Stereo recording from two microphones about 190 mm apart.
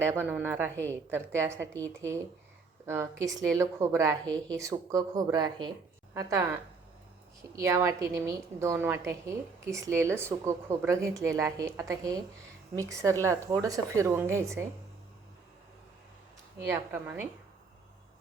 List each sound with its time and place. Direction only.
0.0 s a woman's voice: 15° right (ahead or behind)
7.5 s a woman's voice: 15° right (ahead or behind)
16.6 s a woman's voice: 15° right (ahead or behind)